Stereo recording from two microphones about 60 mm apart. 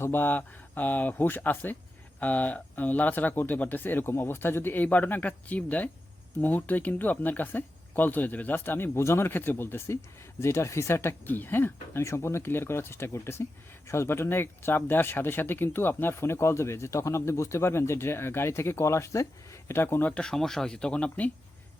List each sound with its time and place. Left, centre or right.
0.0 s speech: left
11.3 s speech: left
12.0 s speech: left
19.7 s speech: left
20.1 s speech: centre